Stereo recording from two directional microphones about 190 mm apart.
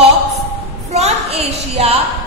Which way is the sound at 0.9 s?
35° right (ahead or behind).